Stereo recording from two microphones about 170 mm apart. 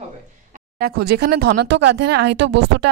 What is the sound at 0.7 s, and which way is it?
Speech, 65° right (ahead or behind).